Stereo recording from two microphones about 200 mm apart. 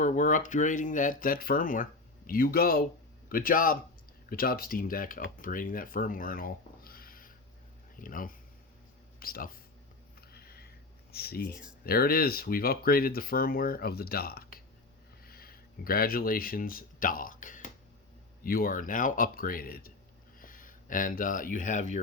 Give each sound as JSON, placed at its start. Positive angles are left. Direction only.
{"t": 0.0, "sound": "speech", "side_deg": 40}
{"t": 10.2, "sound": "a sound", "side_deg": 50}
{"t": 11.1, "sound": "speech", "side_deg": 50}